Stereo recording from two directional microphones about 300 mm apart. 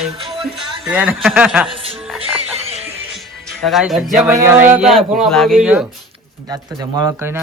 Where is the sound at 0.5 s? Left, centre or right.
Centre.